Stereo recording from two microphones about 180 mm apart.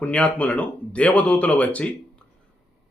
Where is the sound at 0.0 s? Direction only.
5° left (ahead or behind).